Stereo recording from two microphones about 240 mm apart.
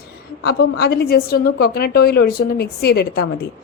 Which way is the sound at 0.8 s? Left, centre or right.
Left.